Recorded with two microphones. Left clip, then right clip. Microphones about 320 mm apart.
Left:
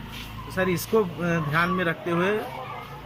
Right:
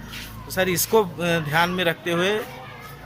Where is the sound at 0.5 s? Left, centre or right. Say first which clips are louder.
Right 4 dB; right.